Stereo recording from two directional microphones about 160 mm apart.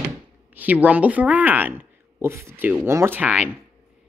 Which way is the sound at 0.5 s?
10° right (ahead or behind).